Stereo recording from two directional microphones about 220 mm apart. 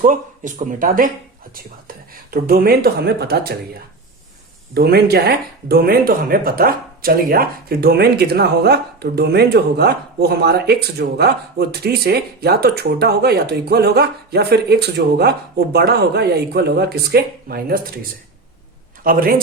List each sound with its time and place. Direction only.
0.0 s speech: 35° right (ahead or behind)
4.7 s speech: 45° right (ahead or behind)
19.0 s speech: 40° right (ahead or behind)